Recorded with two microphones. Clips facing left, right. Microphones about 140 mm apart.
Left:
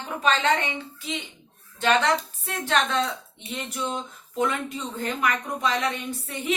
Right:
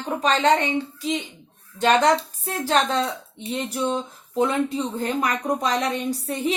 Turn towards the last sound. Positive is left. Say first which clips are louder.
# right 5 dB
turn(degrees=-40)  # may be behind; listen again after turning